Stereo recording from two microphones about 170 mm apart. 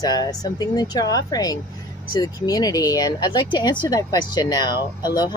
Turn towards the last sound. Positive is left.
turn(degrees=25)  # may be behind; listen again after turning